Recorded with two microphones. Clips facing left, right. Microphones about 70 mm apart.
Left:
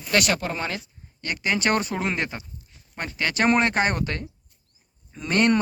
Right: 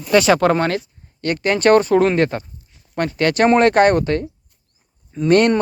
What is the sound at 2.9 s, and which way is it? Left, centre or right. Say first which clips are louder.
Speech: right 9 dB; right.